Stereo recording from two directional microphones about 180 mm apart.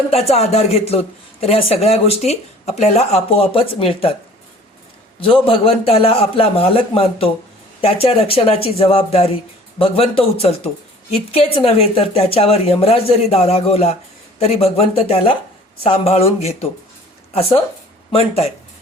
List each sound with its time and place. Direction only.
0.1 s speech: 35° left (ahead or behind)
5.2 s speech: 30° left (ahead or behind)
18.1 s speech: 35° left (ahead or behind)